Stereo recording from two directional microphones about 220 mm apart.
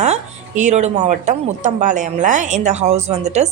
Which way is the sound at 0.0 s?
30° right (ahead or behind).